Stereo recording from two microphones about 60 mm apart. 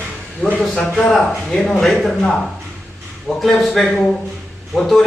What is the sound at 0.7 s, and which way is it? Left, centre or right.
A man's voice, centre.